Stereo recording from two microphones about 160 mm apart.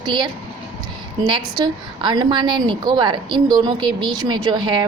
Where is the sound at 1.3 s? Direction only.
30° right (ahead or behind).